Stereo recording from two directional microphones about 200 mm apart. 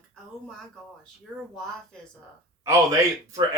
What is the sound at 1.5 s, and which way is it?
Speech, centre (ahead or behind).